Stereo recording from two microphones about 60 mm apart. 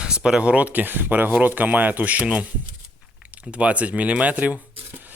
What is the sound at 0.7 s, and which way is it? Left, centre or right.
Speech, right.